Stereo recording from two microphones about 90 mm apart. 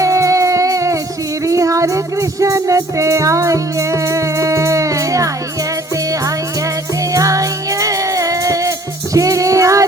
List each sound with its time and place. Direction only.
0.0 s music: 35° right (ahead or behind)
7.1 s music: 35° right (ahead or behind)